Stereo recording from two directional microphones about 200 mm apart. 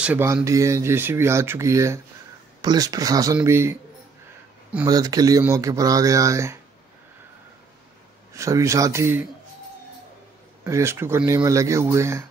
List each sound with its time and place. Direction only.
0.0 s speech: 10° right (ahead or behind)
4.8 s speech: 20° right (ahead or behind)
8.3 s speech: 15° right (ahead or behind)
10.6 s speech: 15° right (ahead or behind)